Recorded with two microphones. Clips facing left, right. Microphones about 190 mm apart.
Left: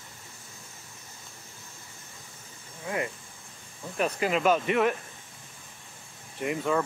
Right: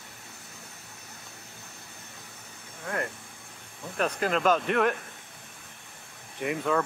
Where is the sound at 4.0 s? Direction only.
5° left (ahead or behind).